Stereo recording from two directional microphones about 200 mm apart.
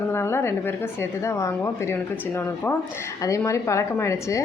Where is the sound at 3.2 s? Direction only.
15° left (ahead or behind).